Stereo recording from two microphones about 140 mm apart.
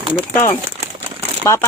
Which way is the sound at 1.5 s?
20° left (ahead or behind).